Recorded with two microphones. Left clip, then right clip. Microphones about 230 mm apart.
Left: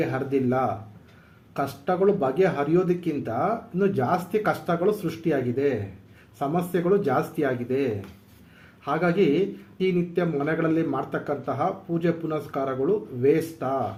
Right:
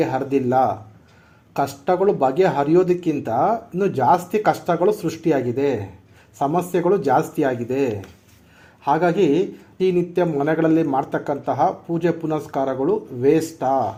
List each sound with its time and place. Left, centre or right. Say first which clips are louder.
0.0 s speech: right 5 dB; right